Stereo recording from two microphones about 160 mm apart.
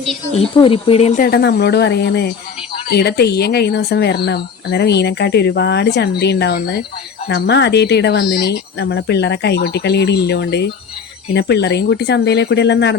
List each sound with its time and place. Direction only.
0.3 s speech: 35° left (ahead or behind)
1.2 s speech: 90° left